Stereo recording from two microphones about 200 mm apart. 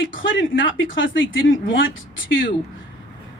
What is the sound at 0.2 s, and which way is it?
Speech, 70° left (ahead or behind).